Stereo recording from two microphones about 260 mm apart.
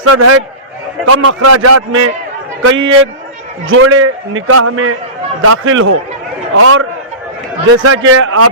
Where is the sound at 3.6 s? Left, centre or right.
Right.